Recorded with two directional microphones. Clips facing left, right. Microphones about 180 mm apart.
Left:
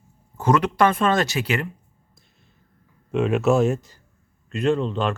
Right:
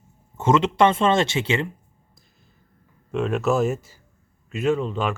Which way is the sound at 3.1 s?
Centre (ahead or behind).